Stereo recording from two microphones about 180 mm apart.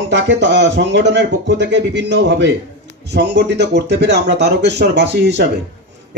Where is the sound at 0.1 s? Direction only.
80° right.